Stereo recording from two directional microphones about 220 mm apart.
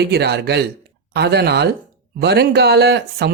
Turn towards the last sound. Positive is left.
turn(degrees=-50)  # may be behind; listen again after turning